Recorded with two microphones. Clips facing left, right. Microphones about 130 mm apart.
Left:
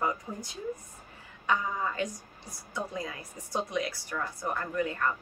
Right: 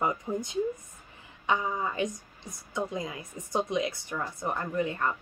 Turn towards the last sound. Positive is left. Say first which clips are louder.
# right 1 dB
turn(degrees=-20)  # may be behind; listen again after turning